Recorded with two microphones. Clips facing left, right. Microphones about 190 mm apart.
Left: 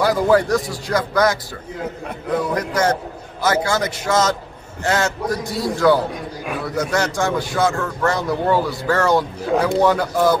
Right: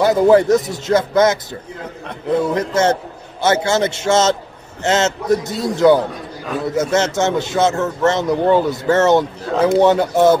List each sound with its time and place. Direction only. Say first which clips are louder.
0.0 s a man's voice: right 4 dB; 25° right (ahead or behind)